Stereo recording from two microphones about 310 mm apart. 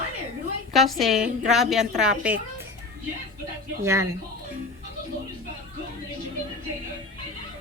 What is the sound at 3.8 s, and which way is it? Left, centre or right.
Speech, centre.